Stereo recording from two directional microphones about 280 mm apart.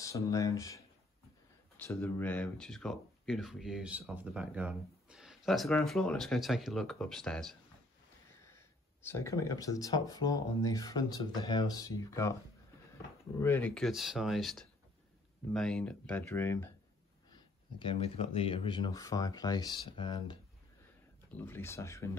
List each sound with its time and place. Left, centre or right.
0.0 s speech: centre
13.4 s speech: centre
17.3 s speech: centre